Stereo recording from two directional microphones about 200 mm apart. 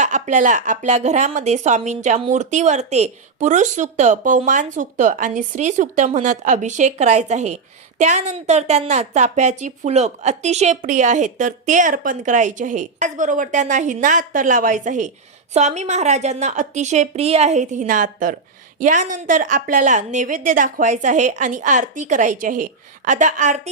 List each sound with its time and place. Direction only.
0.0 s speech: 40° right (ahead or behind)